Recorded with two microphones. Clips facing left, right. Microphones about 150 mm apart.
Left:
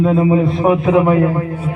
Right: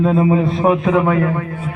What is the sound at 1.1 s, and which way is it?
Speech, 25° left (ahead or behind).